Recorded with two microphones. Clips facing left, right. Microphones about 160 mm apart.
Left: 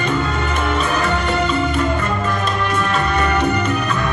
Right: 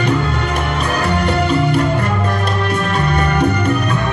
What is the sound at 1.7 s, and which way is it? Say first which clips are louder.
Music: right 3 dB; 60° right (ahead or behind).